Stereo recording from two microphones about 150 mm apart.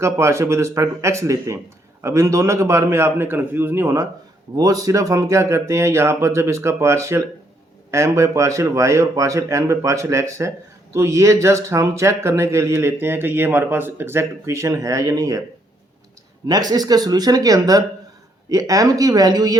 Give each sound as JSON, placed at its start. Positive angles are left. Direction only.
{"t": 0.0, "sound": "speech", "side_deg": -20}
{"t": 16.5, "sound": "speech", "side_deg": -25}